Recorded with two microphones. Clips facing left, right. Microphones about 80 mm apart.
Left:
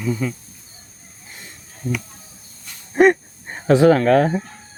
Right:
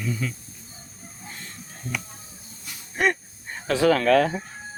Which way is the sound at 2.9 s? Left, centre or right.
Left.